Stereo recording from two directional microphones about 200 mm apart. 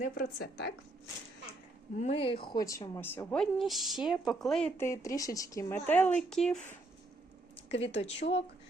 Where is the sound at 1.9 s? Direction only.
30° left (ahead or behind); by 6.6 s 5° left (ahead or behind).